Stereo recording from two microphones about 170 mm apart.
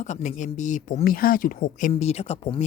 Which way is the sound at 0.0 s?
45° left (ahead or behind).